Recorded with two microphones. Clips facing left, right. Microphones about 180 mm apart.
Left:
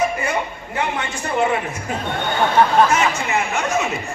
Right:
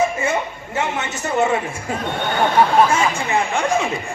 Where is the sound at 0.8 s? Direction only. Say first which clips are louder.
Right 1 dB; 25° right (ahead or behind).